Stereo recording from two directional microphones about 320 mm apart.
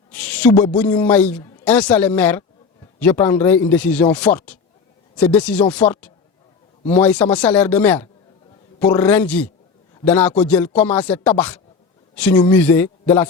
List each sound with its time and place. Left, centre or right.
0.1 s a man's voice: centre